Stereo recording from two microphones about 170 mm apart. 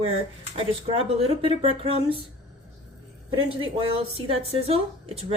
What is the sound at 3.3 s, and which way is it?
A woman's voice, 30° right (ahead or behind).